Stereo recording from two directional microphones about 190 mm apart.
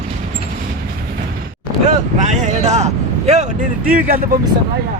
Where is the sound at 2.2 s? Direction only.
40° right (ahead or behind).